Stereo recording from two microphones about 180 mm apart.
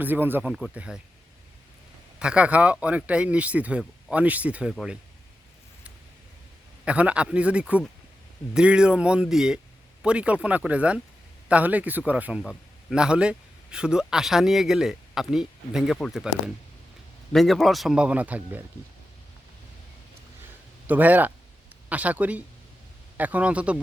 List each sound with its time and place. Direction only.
0.0 s speech: 10° right (ahead or behind)
2.1 s speech: 5° right (ahead or behind)
6.8 s speech: 5° right (ahead or behind)
17.3 s speech: centre (ahead or behind)
20.8 s speech: 10° right (ahead or behind)